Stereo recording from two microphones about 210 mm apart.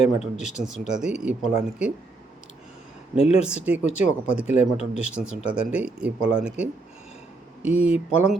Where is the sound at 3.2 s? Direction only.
30° left (ahead or behind).